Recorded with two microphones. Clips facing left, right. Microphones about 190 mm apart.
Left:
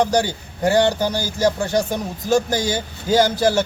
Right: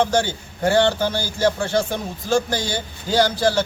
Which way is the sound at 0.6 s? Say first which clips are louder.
Left 1 dB; 15° left (ahead or behind).